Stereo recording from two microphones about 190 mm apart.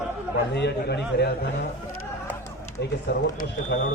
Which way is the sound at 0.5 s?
60° left (ahead or behind).